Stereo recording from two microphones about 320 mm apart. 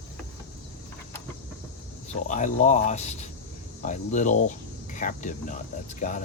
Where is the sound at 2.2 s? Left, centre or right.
Left.